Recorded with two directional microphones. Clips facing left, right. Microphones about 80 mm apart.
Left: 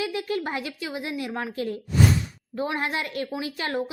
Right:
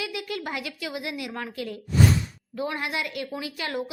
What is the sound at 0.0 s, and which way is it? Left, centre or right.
A woman's voice, left.